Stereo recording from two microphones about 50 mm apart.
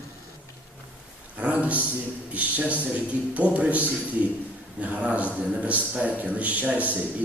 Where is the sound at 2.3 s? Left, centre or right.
Right.